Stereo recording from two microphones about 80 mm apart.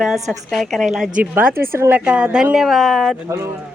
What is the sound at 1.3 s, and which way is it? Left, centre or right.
Speech, right.